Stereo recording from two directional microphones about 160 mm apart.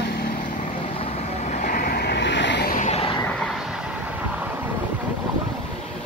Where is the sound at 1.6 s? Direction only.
60° left (ahead or behind); by 2.7 s 90° left.